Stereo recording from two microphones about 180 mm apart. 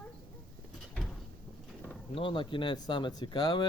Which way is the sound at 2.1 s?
30° left (ahead or behind).